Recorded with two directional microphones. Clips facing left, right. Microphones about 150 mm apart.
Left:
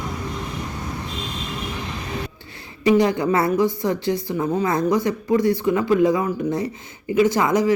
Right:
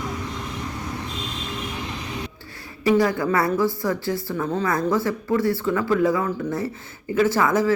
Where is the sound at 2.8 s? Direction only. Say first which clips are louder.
Left 2 dB; 20° left (ahead or behind).